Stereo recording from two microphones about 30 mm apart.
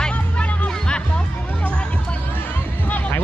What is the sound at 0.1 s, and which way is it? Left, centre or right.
Music, left.